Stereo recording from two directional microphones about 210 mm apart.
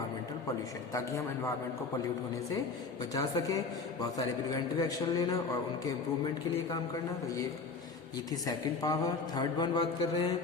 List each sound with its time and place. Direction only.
0.9 s a man's voice: 15° left (ahead or behind)
3.0 s a man's voice: 15° left (ahead or behind)
8.4 s a man's voice: 15° left (ahead or behind)